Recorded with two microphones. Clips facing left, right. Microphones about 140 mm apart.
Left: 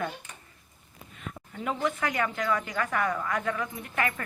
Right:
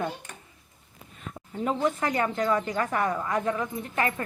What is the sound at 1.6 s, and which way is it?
Speech, 35° right (ahead or behind).